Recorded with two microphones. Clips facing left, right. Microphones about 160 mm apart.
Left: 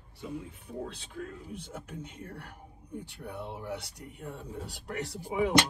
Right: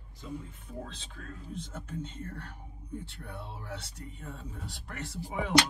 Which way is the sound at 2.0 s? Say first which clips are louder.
Right 2 dB; 10° left (ahead or behind).